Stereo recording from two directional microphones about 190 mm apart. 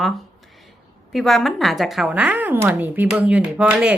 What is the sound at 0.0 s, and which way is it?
Speech, centre (ahead or behind).